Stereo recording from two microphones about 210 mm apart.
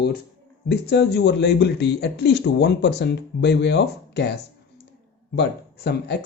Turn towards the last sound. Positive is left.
turn(degrees=50)  # may be behind; listen again after turning